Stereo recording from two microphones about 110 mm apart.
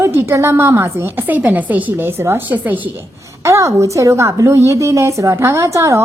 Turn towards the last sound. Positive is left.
turn(degrees=-25)  # may be behind; listen again after turning